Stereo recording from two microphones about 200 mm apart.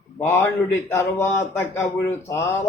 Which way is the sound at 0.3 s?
15° left (ahead or behind).